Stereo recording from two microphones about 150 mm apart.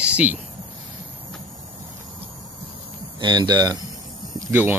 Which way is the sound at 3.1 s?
30° right (ahead or behind).